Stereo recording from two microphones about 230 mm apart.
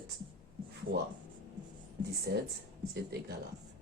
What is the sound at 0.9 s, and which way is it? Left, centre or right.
Speech, right.